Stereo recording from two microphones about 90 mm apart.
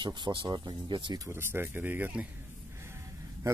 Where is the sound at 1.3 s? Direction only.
25° right (ahead or behind).